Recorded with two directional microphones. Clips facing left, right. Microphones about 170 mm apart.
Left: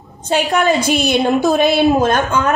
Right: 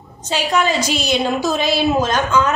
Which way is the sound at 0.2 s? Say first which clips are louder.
Left 3 dB; 55° left (ahead or behind).